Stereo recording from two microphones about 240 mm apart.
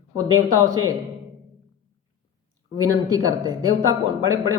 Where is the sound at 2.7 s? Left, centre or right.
Centre.